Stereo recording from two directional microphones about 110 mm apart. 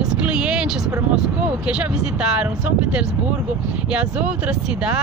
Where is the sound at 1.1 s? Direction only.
10° right (ahead or behind).